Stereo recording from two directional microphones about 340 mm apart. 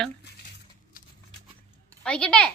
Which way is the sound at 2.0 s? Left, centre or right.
Centre.